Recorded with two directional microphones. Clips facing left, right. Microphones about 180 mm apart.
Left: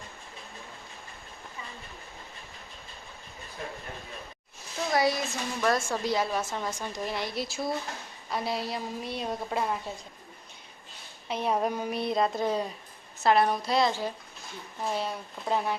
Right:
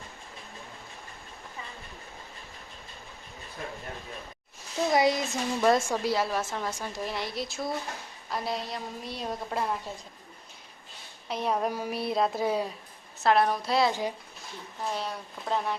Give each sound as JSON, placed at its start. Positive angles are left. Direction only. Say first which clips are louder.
{"t": 4.9, "sound": "a sound", "louder": "right 2 dB", "side_deg": -20}
{"t": 5.9, "sound": "a woman's voice", "louder": "right 1 dB", "side_deg": -5}
{"t": 11.3, "sound": "a woman's voice", "louder": "left 1 dB", "side_deg": 0}